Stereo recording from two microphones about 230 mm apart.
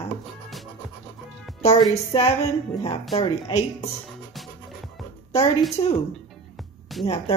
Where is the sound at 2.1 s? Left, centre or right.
Left.